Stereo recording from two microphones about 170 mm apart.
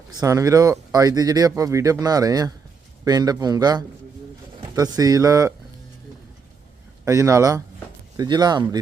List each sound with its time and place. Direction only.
0.1 s speech: 20° right (ahead or behind)
7.0 s speech: 20° right (ahead or behind)